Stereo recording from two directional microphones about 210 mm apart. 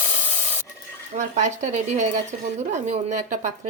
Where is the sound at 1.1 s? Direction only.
35° right (ahead or behind).